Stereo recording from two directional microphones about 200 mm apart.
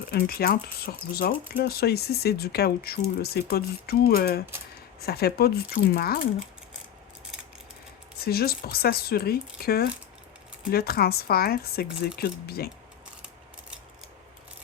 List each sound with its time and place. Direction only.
0.1 s speech: 50° left (ahead or behind)
8.2 s speech: 50° left (ahead or behind)